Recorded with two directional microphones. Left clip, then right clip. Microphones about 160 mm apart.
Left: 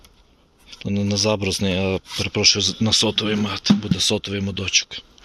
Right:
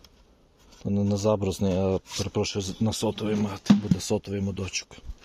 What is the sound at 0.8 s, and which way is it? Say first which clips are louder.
Speech: left 4 dB; 5° right (ahead or behind).